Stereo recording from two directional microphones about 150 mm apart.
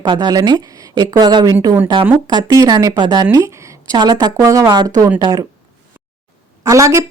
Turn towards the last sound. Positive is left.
turn(degrees=-20)  # may be behind; listen again after turning